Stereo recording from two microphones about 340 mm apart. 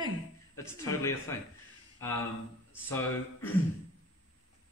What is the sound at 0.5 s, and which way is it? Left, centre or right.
Speech, centre.